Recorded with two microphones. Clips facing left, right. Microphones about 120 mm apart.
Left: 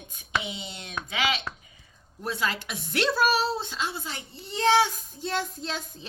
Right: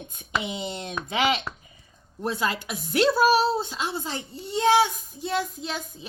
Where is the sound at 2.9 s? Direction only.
10° right (ahead or behind).